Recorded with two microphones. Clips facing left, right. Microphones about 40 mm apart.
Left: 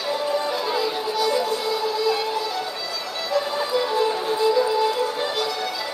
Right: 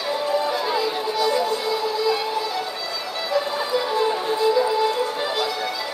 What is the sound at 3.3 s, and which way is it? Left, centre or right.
Music, centre.